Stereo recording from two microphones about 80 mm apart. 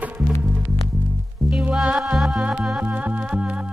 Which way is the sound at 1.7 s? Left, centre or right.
Centre.